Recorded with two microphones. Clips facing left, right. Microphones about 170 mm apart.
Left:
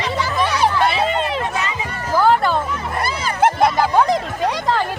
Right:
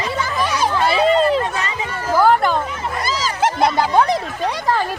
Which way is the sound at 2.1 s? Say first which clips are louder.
Right 1 dB; 15° right (ahead or behind).